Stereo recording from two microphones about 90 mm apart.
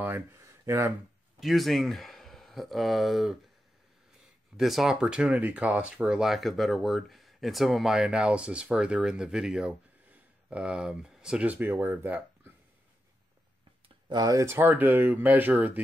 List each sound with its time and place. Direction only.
0.0 s a sound: 25° right (ahead or behind)
1.4 s speech: centre (ahead or behind)
4.6 s speech: 5° right (ahead or behind); by 12.5 s 20° right (ahead or behind)
14.1 s speech: 40° right (ahead or behind)
14.4 s speech: 30° right (ahead or behind)
14.7 s speech: 20° right (ahead or behind)